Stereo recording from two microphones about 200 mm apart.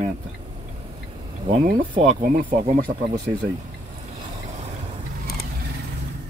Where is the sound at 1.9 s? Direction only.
35° right (ahead or behind).